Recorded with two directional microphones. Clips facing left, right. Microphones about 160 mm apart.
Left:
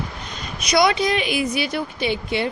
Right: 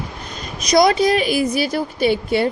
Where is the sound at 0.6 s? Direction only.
40° right (ahead or behind).